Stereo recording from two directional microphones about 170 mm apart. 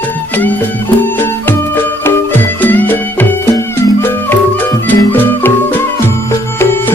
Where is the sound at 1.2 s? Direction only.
10° left (ahead or behind).